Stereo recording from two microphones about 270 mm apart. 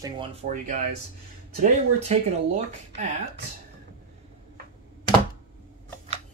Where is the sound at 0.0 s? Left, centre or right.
Centre.